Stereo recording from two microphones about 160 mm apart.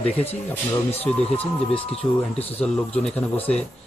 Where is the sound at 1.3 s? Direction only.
40° left (ahead or behind).